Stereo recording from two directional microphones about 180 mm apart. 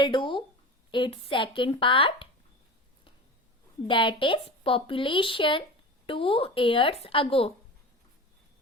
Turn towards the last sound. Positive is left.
turn(degrees=30)  # may be behind; listen again after turning